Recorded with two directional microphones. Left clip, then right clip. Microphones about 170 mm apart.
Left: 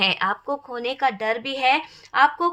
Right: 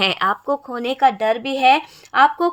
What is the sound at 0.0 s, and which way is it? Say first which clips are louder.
Speech: right 3 dB; 40° right (ahead or behind).